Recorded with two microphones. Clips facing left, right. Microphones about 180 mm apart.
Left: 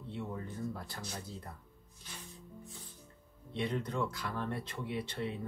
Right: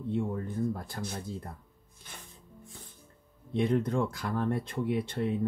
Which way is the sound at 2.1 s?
55° right (ahead or behind).